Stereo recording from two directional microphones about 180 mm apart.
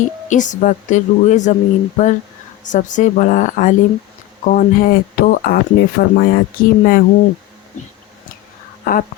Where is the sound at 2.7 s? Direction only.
45° left (ahead or behind).